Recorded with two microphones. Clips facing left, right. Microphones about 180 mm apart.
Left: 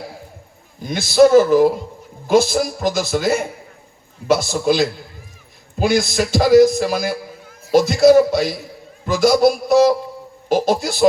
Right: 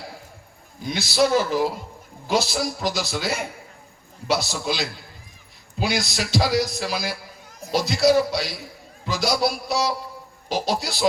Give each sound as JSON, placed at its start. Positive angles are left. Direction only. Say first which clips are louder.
{"t": 0.9, "sound": "speech", "louder": "left 9 dB", "side_deg": 50}